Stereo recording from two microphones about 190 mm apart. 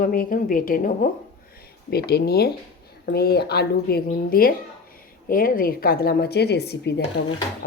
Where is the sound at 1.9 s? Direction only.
55° left (ahead or behind).